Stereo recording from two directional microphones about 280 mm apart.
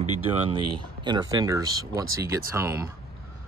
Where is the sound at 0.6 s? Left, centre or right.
Right.